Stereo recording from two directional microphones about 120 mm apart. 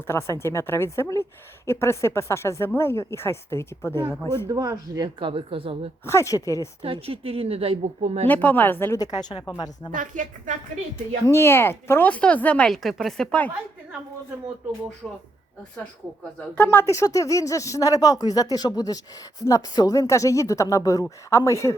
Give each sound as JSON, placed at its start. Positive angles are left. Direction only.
{"t": 0.1, "sound": "a woman's voice", "side_deg": 20}
{"t": 4.4, "sound": "a woman's voice", "side_deg": -30}
{"t": 6.1, "sound": "a woman's voice", "side_deg": 25}
{"t": 6.8, "sound": "a woman's voice", "side_deg": -50}
{"t": 8.3, "sound": "speech", "side_deg": 15}
{"t": 9.9, "sound": "a woman's voice", "side_deg": -90}
{"t": 11.3, "sound": "speech", "side_deg": 20}
{"t": 16.6, "sound": "a woman's voice", "side_deg": 20}